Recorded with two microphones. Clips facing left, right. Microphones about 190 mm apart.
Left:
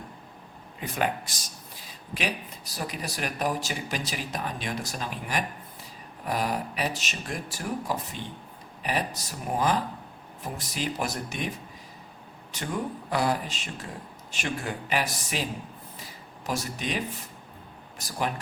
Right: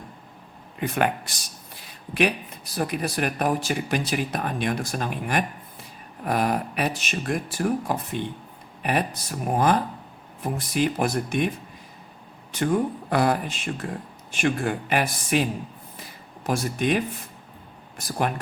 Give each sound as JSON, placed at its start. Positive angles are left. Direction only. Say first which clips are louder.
{"t": 0.8, "sound": "speech", "louder": "right 5 dB", "side_deg": -65}
{"t": 16.5, "sound": "speech", "louder": "right 7 dB", "side_deg": -55}